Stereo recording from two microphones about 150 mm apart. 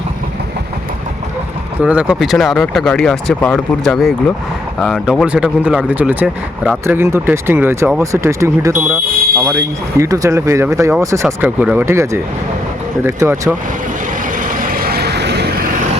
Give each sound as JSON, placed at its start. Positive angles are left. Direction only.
{"t": 1.8, "sound": "speech", "side_deg": -5}
{"t": 14.4, "sound": "vehicle", "side_deg": -70}